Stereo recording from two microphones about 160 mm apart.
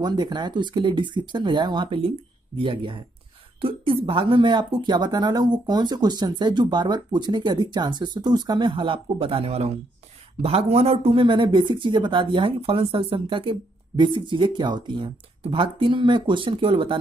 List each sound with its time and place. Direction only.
0.0 s speech: 25° right (ahead or behind)